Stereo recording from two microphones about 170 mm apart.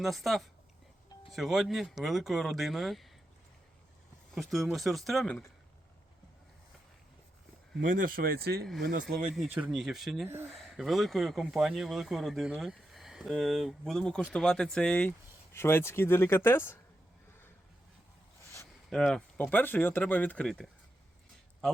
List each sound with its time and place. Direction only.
0.0 s speech: centre (ahead or behind)
4.4 s speech: centre (ahead or behind)
7.9 s speech: 50° right (ahead or behind)
9.6 s speech: 5° right (ahead or behind); by 16.7 s 15° left (ahead or behind)
18.9 s speech: 5° left (ahead or behind)